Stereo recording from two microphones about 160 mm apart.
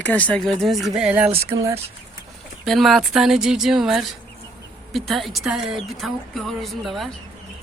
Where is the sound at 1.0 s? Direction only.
5° right (ahead or behind).